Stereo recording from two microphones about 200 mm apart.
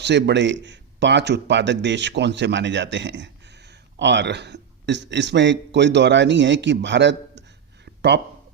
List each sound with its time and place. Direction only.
0.0 s speech: 60° right (ahead or behind)